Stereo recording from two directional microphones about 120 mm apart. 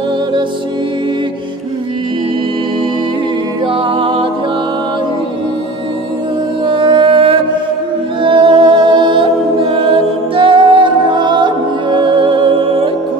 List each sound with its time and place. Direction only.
3.6 s music: 50° right (ahead or behind)
6.6 s music: 45° right (ahead or behind)